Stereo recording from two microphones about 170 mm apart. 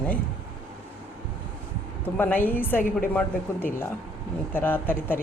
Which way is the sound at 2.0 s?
10° left (ahead or behind).